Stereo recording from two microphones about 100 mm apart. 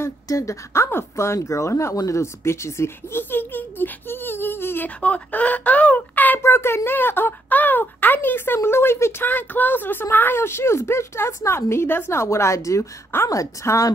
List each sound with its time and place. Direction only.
0.0 s speech: 30° left (ahead or behind)